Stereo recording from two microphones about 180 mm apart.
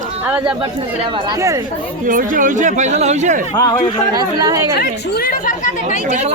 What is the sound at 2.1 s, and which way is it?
Speech, 50° right (ahead or behind).